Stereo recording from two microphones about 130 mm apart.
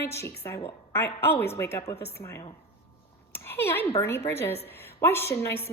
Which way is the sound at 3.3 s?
15° left (ahead or behind).